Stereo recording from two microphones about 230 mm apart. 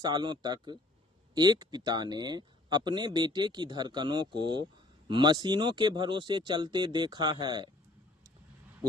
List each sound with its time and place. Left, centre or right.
0.0 s speech: centre